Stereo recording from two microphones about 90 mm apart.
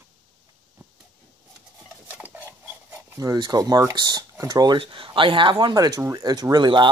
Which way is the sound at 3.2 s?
50° right (ahead or behind).